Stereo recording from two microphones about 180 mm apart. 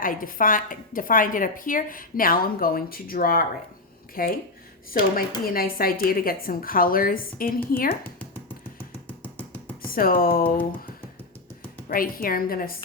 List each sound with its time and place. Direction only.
0.0 s a woman's voice: 50° left (ahead or behind)
9.0 s music: 10° left (ahead or behind)
9.9 s a woman's voice: 55° left (ahead or behind)
11.9 s a woman's voice: 55° left (ahead or behind)